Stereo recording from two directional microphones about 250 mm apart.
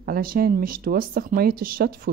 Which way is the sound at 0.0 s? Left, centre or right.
Right.